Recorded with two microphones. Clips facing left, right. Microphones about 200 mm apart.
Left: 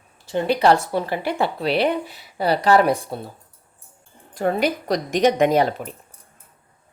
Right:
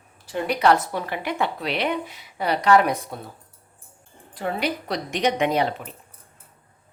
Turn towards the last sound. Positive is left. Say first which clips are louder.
# left 5 dB
turn(degrees=45)  # may be behind; listen again after turning